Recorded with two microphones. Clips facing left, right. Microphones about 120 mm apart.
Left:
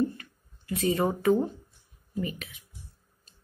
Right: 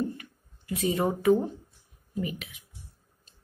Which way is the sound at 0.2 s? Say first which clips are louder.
Right 2 dB; 15° right (ahead or behind).